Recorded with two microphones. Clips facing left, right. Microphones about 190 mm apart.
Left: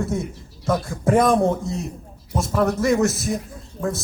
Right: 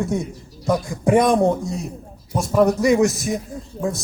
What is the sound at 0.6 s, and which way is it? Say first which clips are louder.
Speech: right 2 dB; 15° right (ahead or behind).